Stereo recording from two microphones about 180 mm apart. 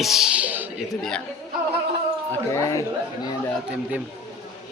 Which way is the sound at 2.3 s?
15° left (ahead or behind).